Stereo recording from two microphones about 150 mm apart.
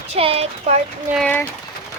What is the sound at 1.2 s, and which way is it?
Speech, 10° left (ahead or behind).